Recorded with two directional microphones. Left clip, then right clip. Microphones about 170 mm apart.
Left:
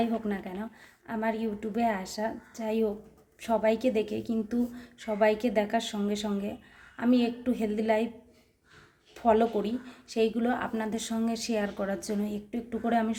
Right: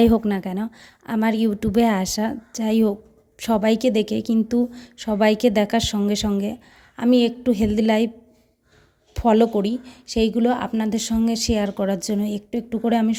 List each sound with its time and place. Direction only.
0.0 s a woman's voice: 80° right
9.1 s speech: 65° right (ahead or behind)